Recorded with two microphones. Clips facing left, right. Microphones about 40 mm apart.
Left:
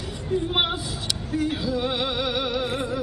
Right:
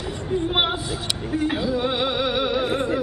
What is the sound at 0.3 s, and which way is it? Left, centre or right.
Speech, centre.